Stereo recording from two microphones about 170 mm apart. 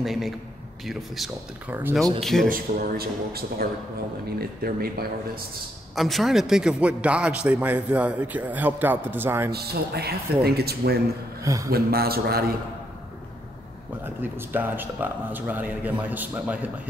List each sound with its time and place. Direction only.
0.0 s speech: centre (ahead or behind)
2.5 s speech: 60° right (ahead or behind)
5.9 s a man's voice: centre (ahead or behind)
9.5 s speech: 70° right (ahead or behind)
11.4 s a man's voice: 20° right (ahead or behind)
11.7 s speech: 65° right (ahead or behind)
14.0 s a man's voice: 10° right (ahead or behind)